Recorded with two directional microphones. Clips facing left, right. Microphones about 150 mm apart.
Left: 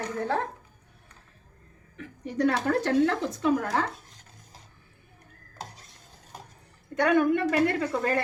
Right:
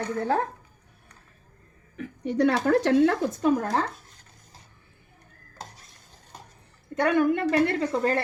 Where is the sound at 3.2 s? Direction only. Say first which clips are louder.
Right 2 dB; 45° right (ahead or behind).